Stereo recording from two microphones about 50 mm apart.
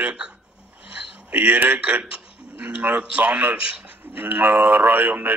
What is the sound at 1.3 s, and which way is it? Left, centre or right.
Speech, right.